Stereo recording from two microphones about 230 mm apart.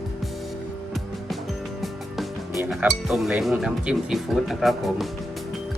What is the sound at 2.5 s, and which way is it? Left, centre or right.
Speech, centre.